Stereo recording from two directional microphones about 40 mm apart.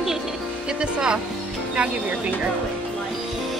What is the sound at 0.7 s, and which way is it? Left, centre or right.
Speech, right.